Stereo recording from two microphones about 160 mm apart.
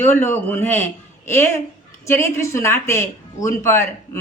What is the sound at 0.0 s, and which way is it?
A woman's voice, 15° left (ahead or behind).